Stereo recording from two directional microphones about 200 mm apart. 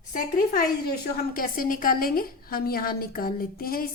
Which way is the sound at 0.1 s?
50° left (ahead or behind).